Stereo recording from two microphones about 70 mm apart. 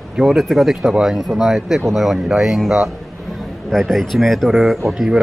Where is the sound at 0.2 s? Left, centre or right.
Centre.